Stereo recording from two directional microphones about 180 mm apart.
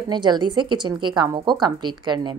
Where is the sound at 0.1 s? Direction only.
25° right (ahead or behind).